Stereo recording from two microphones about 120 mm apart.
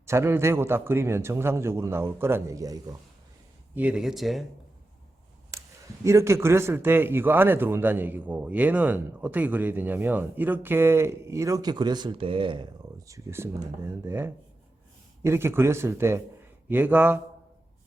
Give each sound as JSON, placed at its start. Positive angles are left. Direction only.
{"t": 0.0, "sound": "a man's voice", "side_deg": -20}
{"t": 3.8, "sound": "speech", "side_deg": -15}
{"t": 4.0, "sound": "speech", "side_deg": 0}
{"t": 5.5, "sound": "a sound", "side_deg": -25}
{"t": 6.1, "sound": "a man's voice", "side_deg": -25}